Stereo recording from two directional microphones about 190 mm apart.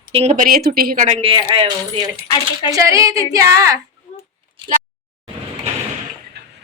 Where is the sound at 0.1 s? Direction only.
30° right (ahead or behind).